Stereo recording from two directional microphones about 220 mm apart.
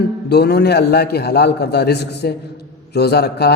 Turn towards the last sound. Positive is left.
turn(degrees=45)  # may be behind; listen again after turning